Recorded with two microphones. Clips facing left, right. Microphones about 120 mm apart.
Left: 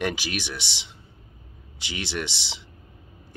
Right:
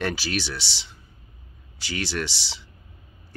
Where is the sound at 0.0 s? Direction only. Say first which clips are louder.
Right 1 dB; 15° left (ahead or behind).